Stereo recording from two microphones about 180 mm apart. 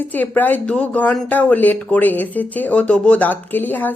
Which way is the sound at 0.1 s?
10° left (ahead or behind).